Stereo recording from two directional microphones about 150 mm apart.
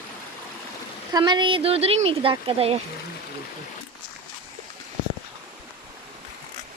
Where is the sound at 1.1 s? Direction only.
30° right (ahead or behind).